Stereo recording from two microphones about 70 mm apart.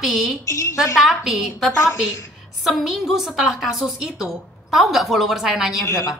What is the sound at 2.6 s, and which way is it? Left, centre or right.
A woman's voice, centre.